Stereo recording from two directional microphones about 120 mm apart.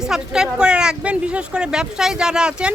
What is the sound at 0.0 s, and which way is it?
Speech, 5° right (ahead or behind).